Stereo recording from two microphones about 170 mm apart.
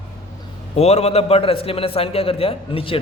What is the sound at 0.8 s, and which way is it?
A man's voice, 40° left (ahead or behind).